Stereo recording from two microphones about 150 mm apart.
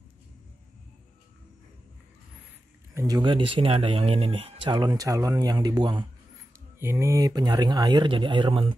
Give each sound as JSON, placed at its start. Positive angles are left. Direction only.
{"t": 2.9, "sound": "speech", "side_deg": -20}
{"t": 6.8, "sound": "speech", "side_deg": -15}